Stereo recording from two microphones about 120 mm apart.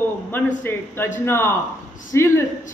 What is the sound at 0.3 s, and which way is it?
A man's voice, 15° left (ahead or behind).